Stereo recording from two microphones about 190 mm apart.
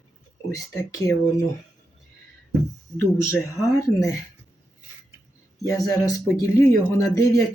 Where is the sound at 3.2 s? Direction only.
15° left (ahead or behind).